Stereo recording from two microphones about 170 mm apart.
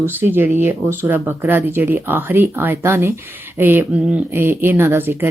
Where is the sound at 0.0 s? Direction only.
10° right (ahead or behind).